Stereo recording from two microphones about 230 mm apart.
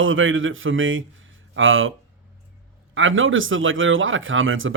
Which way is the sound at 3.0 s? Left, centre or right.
Right.